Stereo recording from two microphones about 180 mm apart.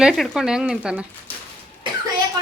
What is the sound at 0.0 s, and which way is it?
Speech, centre (ahead or behind).